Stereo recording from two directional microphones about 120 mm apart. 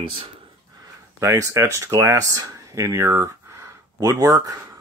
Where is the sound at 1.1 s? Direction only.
25° right (ahead or behind).